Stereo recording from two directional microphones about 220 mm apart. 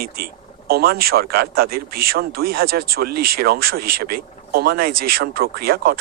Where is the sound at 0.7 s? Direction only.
45° right (ahead or behind).